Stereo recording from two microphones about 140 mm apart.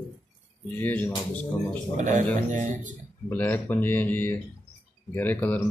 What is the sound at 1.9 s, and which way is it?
Speech, 60° right (ahead or behind).